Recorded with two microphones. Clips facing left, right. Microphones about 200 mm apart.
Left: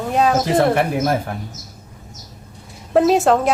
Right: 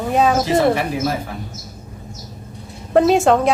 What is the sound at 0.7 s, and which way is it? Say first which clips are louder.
Speech: left 2 dB; 55° left (ahead or behind).